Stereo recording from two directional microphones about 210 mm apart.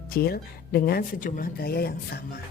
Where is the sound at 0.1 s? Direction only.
45° left (ahead or behind).